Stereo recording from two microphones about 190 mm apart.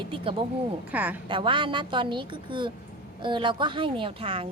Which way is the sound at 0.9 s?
10° right (ahead or behind).